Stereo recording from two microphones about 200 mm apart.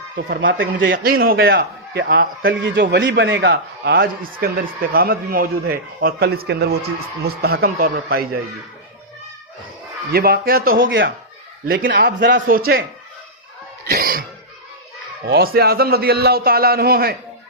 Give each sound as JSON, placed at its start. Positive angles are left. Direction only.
{"t": 0.2, "sound": "speech", "side_deg": -65}
{"t": 0.8, "sound": "a man's voice", "side_deg": -45}
{"t": 10.1, "sound": "a man's voice", "side_deg": -50}
{"t": 10.8, "sound": "a man's voice", "side_deg": -60}
{"t": 13.8, "sound": "music", "side_deg": -45}
{"t": 15.3, "sound": "a man's voice", "side_deg": -50}